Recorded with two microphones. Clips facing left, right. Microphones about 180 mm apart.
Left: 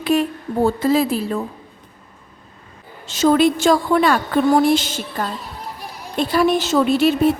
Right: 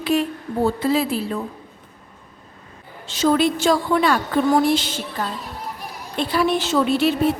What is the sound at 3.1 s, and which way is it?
A woman's voice, 50° left (ahead or behind).